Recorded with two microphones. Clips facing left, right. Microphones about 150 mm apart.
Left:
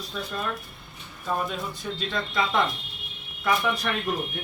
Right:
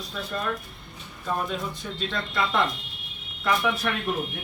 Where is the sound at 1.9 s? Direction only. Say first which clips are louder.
Left 1 dB; centre (ahead or behind).